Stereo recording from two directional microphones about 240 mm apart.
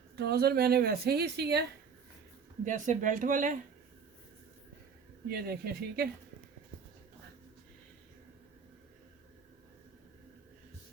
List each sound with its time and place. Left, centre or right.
0.2 s a woman's voice: right
2.6 s a woman's voice: right
5.3 s a woman's voice: right